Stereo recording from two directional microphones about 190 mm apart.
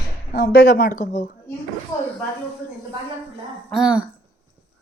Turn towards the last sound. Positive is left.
turn(degrees=-5)  # may be behind; listen again after turning